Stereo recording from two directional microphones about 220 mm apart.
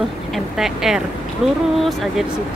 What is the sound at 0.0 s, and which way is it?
Speech, centre (ahead or behind).